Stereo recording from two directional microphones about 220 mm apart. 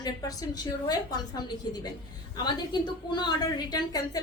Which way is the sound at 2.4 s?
20° left (ahead or behind).